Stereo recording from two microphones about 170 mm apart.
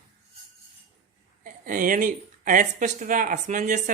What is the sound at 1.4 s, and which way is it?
Speech, 55° right (ahead or behind).